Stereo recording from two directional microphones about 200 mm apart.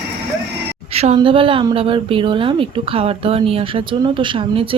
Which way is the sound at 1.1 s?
25° right (ahead or behind).